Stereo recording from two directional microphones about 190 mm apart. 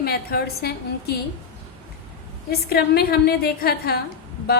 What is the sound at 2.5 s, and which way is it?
A woman's voice, 55° left (ahead or behind).